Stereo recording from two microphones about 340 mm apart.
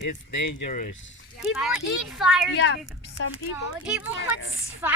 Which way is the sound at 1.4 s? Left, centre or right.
Centre.